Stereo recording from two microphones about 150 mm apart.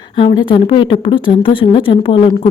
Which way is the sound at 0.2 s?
30° left (ahead or behind).